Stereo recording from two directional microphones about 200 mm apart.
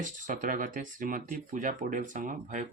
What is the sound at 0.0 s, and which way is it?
Speech, 40° right (ahead or behind).